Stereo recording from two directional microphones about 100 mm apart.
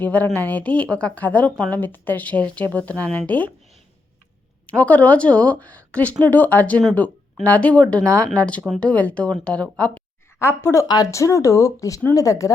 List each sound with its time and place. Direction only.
0.0 s a woman's voice: 15° left (ahead or behind)
4.8 s a woman's voice: 15° left (ahead or behind)
10.4 s speech: 25° left (ahead or behind)
10.8 s a woman's voice: 40° left (ahead or behind)